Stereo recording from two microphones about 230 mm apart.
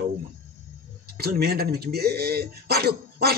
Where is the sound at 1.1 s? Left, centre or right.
Right.